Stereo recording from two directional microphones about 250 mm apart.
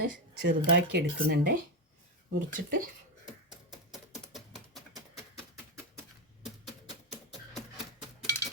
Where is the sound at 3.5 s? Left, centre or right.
Centre.